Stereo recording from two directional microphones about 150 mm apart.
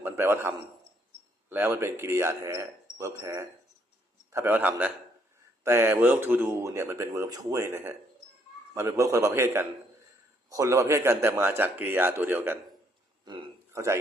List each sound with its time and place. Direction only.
0.0 s a man's voice: 15° right (ahead or behind)
13.2 s a sound: 30° right (ahead or behind)
13.7 s speech: 20° right (ahead or behind)